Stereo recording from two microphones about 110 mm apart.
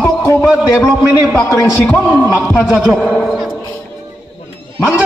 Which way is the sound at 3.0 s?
Centre (ahead or behind).